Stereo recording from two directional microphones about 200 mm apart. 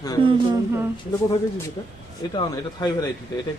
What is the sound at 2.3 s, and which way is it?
Speech, 20° left (ahead or behind).